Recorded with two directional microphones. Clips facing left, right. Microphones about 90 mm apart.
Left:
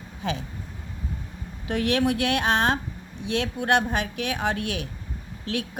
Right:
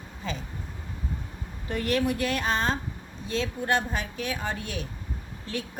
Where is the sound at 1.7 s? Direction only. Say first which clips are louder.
Left 3 dB; 90° left.